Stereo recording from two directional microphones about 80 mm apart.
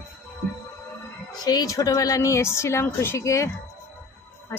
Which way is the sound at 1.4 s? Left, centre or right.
Left.